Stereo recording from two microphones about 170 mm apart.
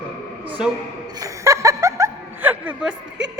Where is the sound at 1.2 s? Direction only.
20° right (ahead or behind).